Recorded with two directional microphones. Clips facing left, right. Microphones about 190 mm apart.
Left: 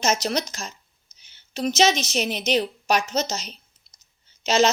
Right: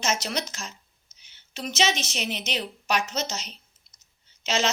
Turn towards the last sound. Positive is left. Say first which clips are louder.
# left 7 dB
turn(degrees=40)  # may be behind; listen again after turning